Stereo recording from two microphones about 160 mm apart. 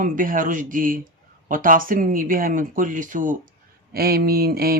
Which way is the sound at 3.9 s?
75° right (ahead or behind).